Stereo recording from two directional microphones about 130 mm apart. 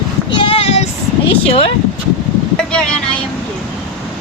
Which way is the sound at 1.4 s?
45° left (ahead or behind).